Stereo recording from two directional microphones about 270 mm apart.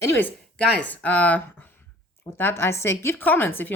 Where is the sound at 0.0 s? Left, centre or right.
Centre.